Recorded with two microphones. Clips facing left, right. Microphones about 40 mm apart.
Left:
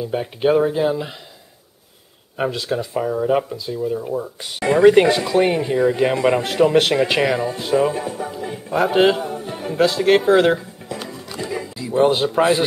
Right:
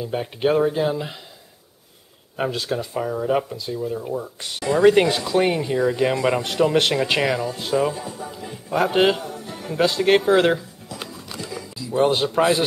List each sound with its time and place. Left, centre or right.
0.0 s speech: centre
2.3 s speech: centre
4.7 s speech: left
5.3 s speech: centre
5.6 s speech: centre
7.9 s speech: left
8.7 s speech: centre
9.2 s music: left
10.0 s speech: centre
11.3 s music: left
11.9 s speech: centre